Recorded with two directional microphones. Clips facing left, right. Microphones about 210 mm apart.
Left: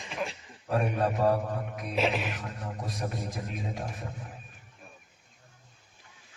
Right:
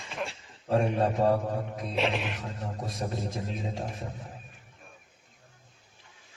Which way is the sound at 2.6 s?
25° right (ahead or behind).